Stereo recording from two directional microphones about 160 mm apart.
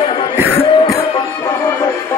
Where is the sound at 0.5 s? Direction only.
35° left (ahead or behind).